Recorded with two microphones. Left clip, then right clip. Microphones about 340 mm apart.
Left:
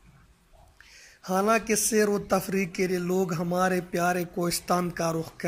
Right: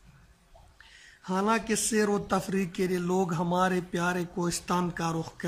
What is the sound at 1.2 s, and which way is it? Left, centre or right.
Speech, centre.